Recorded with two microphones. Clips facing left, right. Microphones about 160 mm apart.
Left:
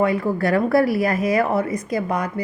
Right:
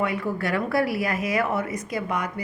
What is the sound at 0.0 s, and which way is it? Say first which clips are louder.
A woman's voice: left 6 dB; 35° left (ahead or behind).